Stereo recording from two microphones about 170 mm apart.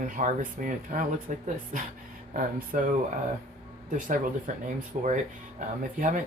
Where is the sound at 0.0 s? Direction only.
50° right (ahead or behind).